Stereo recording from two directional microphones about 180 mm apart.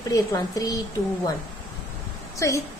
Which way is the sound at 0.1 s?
20° left (ahead or behind).